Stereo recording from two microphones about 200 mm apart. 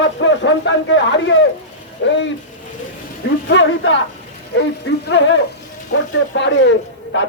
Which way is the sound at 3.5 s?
65° left (ahead or behind).